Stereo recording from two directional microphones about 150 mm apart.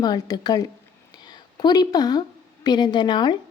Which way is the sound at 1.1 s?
30° left (ahead or behind).